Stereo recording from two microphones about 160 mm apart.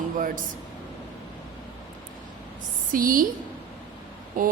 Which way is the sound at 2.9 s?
60° right (ahead or behind).